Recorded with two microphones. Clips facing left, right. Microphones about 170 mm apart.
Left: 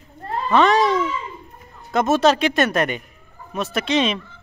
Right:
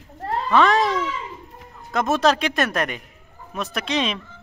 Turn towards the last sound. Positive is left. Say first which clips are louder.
# left 4 dB
turn(degrees=0)  # may be behind; listen again after turning